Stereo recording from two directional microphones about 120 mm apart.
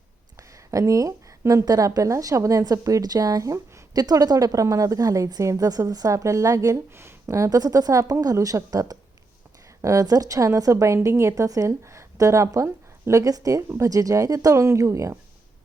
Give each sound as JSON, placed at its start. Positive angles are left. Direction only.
{"t": 0.3, "sound": "a woman's voice", "side_deg": -25}